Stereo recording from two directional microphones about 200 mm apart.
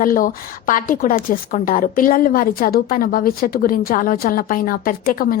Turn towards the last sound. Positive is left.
turn(degrees=45)  # may be behind; listen again after turning